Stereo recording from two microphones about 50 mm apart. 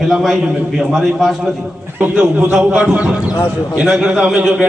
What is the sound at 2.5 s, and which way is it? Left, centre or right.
A man's voice, centre.